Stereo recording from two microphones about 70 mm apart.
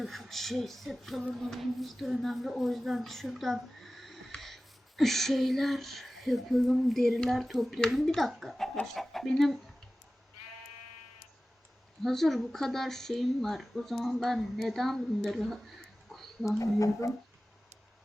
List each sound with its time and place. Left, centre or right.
0.0 s a woman's voice: centre
12.0 s speech: centre
16.0 s a sound: centre
16.5 s speech: left